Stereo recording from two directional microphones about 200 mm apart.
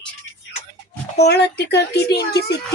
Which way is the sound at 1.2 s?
55° left (ahead or behind).